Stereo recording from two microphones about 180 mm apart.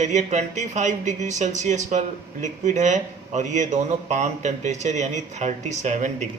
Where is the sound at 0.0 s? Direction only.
40° right (ahead or behind).